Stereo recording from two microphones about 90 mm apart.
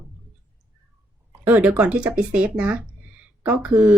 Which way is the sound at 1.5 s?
15° right (ahead or behind).